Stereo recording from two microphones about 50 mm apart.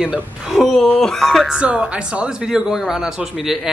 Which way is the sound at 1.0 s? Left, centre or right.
Centre.